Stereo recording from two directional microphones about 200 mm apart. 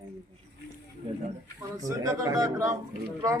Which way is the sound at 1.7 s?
15° right (ahead or behind).